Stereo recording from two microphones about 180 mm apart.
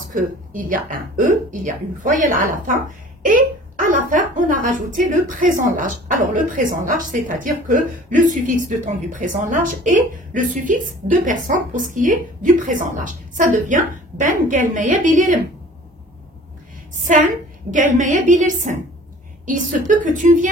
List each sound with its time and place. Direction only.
0.1 s a woman's voice: 50° right (ahead or behind)
17.7 s a woman's voice: 45° right (ahead or behind)